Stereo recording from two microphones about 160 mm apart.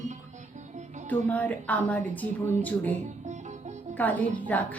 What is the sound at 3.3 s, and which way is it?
Music, 45° right (ahead or behind).